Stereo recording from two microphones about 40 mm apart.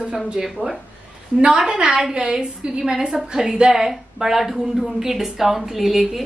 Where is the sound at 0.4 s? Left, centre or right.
Centre.